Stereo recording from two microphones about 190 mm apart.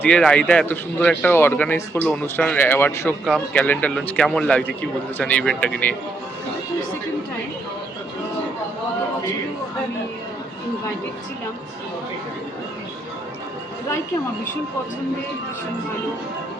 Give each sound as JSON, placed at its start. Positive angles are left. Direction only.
{"t": 0.0, "sound": "speech", "side_deg": 5}